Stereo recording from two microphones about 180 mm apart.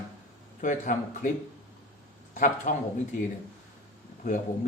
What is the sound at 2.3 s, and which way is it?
Speech, 45° left (ahead or behind).